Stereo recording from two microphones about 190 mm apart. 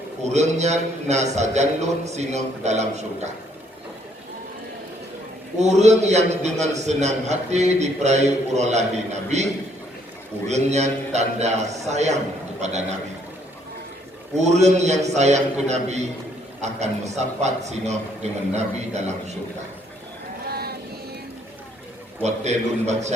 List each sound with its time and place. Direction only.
0.3 s a man's voice: 35° right (ahead or behind)
5.5 s a man's voice: 35° right (ahead or behind)
14.3 s a man's voice: 35° right (ahead or behind)
20.5 s vehicle: 55° right (ahead or behind)
22.2 s a man's voice: 35° right (ahead or behind)